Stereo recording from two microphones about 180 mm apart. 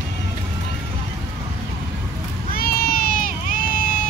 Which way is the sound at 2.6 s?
55° left (ahead or behind).